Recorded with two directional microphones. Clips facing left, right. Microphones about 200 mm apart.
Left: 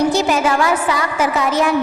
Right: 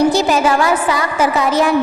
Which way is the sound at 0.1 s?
35° right (ahead or behind).